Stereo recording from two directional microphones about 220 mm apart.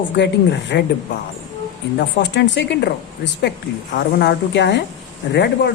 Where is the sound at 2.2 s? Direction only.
55° left (ahead or behind).